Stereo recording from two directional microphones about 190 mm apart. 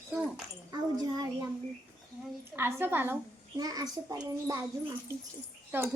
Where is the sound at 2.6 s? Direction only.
10° right (ahead or behind).